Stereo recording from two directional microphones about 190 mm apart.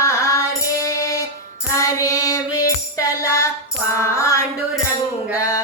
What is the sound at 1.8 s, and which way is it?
Music, 15° left (ahead or behind).